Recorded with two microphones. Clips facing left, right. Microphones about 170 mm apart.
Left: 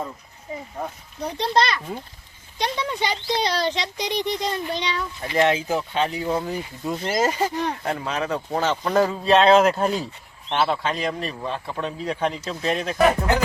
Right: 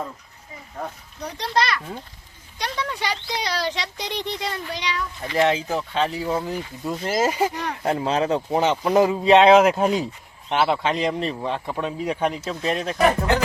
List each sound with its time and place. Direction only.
1.2 s speech: 25° left (ahead or behind)
5.4 s speech: centre (ahead or behind)
7.8 s speech: 30° right (ahead or behind)
8.4 s speech: 15° right (ahead or behind); by 13.2 s centre (ahead or behind)